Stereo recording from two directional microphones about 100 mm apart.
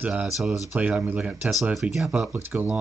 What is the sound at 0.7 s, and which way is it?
Speech, 15° right (ahead or behind).